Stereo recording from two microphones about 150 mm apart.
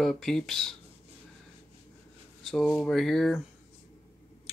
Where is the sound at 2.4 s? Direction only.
Centre (ahead or behind).